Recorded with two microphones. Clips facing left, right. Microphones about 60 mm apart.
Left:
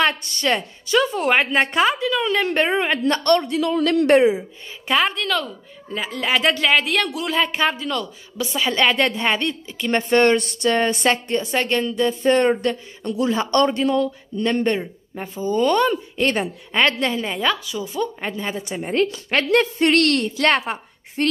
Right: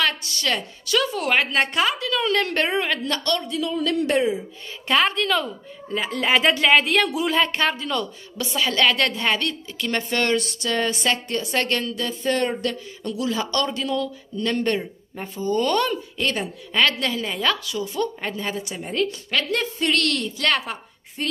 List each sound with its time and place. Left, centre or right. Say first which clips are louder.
0.4 s a woman's voice: left 5 dB; left
3.0 s a woman's voice: left 7 dB; left
4.8 s a woman's voice: even; centre; by 11.1 s left
11.2 s a woman's voice: left 3 dB; left
16.2 s a woman's voice: left 4 dB; left
16.7 s a woman's voice: left 2 dB; left
17.5 s a woman's voice: left 1 dB; centre
18.9 s a woman's voice: left 4 dB; left
21.2 s a woman's voice: left 6 dB; left